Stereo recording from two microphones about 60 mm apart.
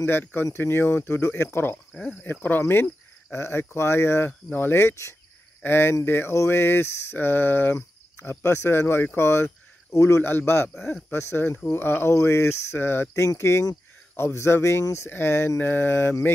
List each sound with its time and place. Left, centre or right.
0.0 s speech: left
4.3 s speech: left
5.6 s speech: left